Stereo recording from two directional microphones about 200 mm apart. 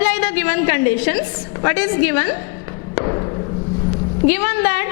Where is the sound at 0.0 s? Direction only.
10° left (ahead or behind).